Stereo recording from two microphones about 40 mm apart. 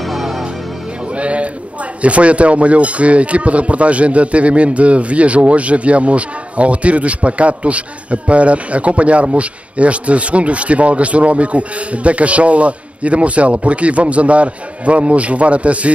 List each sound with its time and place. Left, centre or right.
0.0 s music: centre
1.1 s speech: right